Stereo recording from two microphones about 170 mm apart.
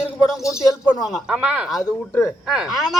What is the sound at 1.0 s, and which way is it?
Speech, 5° right (ahead or behind).